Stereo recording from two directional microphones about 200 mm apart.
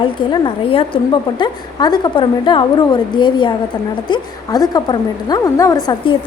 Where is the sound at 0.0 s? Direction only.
25° left (ahead or behind).